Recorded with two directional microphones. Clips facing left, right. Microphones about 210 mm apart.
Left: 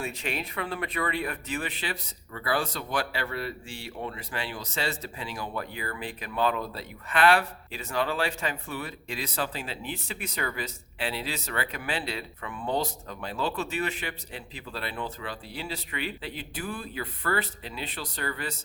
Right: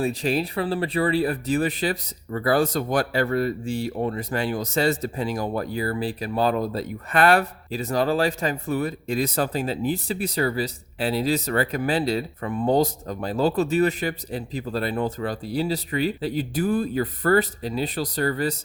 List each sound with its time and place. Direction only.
0.0 s speech: 35° right (ahead or behind)